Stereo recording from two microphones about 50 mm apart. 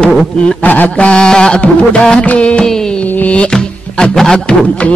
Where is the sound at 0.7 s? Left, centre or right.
Left; by 1.6 s centre.